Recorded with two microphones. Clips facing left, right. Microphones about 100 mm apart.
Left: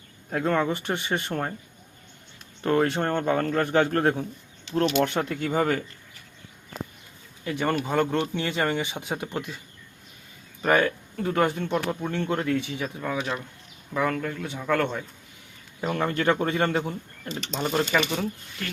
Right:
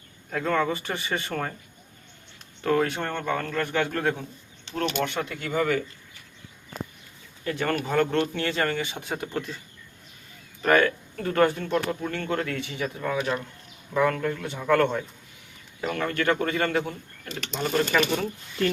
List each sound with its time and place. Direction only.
0.3 s a man's voice: 30° left (ahead or behind)
2.6 s a man's voice: 30° left (ahead or behind)
7.4 s speech: 15° left (ahead or behind)
10.6 s speech: 15° left (ahead or behind)
13.0 s speech: centre (ahead or behind)
15.8 s speech: 25° left (ahead or behind)
17.9 s speech: 10° left (ahead or behind)